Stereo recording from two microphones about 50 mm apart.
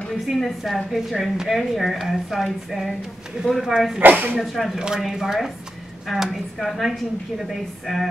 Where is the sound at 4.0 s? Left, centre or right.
Right.